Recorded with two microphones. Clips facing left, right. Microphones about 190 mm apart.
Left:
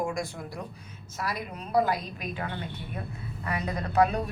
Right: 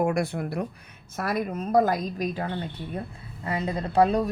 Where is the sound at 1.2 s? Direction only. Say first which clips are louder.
Right 7 dB; 50° right (ahead or behind).